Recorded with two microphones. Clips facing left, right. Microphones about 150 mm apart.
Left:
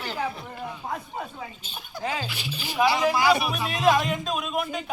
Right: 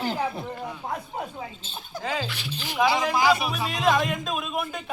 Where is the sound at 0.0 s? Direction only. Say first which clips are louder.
Right 3 dB; 45° right (ahead or behind).